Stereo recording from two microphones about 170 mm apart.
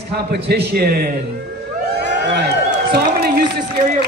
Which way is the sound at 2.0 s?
75° right (ahead or behind).